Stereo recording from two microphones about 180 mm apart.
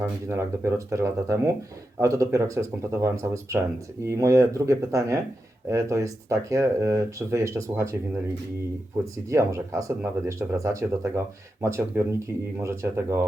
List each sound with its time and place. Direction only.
0.3 s speech: 15° right (ahead or behind)
9.1 s speech: 15° right (ahead or behind)